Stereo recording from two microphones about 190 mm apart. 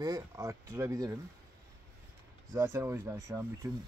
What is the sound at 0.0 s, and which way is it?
Speech, 20° right (ahead or behind).